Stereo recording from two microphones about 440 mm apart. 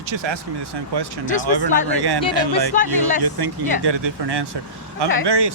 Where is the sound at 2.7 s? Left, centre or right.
Centre.